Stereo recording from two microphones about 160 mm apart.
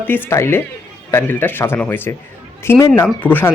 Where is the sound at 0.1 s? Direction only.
15° left (ahead or behind).